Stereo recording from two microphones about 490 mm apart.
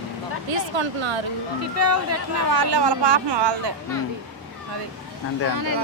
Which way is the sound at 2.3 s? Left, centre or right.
Right.